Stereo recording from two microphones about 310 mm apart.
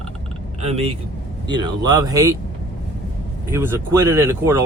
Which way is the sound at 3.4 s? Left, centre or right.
Centre.